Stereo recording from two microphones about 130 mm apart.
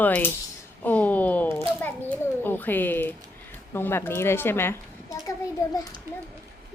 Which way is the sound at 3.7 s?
15° left (ahead or behind).